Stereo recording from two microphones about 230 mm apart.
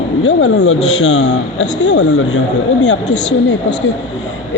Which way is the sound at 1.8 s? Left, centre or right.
Left.